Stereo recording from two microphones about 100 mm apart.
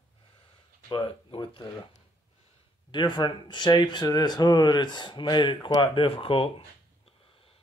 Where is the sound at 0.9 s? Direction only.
55° left (ahead or behind).